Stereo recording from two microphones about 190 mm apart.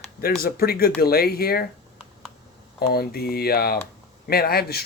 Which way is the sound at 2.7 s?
55° left (ahead or behind).